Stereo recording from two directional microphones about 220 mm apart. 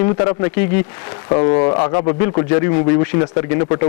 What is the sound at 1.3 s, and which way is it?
Speech, 25° left (ahead or behind).